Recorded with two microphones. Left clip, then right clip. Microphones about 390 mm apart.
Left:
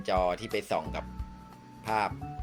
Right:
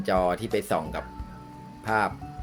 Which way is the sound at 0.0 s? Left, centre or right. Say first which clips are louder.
Right 4 dB; right.